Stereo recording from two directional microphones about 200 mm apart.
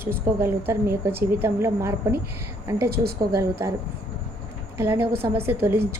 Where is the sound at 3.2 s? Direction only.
15° right (ahead or behind).